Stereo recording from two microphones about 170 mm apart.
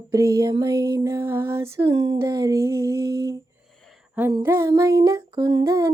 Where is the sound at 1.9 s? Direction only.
25° right (ahead or behind).